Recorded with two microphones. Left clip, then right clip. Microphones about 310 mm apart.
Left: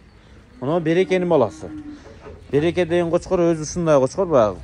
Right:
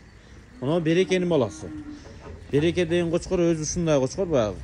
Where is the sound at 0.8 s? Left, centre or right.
Centre.